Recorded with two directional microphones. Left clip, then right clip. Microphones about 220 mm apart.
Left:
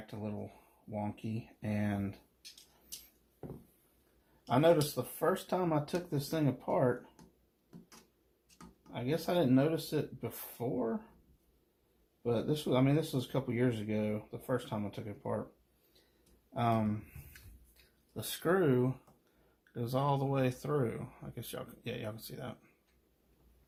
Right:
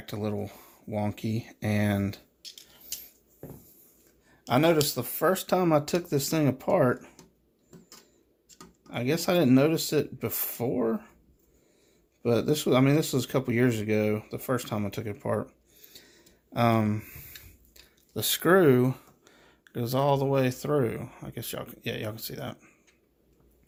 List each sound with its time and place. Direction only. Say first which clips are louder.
0.0 s speech: right 10 dB; 55° right (ahead or behind)
4.4 s speech: right 5 dB; 50° right (ahead or behind)
8.9 s speech: right 8 dB; 55° right (ahead or behind)
12.2 s speech: right 8 dB; 55° right (ahead or behind)
16.5 s speech: right 8 dB; 55° right (ahead or behind)
18.1 s speech: right 10 dB; 50° right (ahead or behind)
19.7 s speech: right 8 dB; 35° right (ahead or behind)